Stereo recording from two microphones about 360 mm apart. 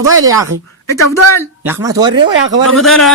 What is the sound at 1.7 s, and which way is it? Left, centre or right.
Speech, centre.